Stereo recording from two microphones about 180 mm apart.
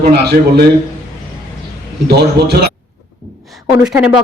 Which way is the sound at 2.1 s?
65° right (ahead or behind).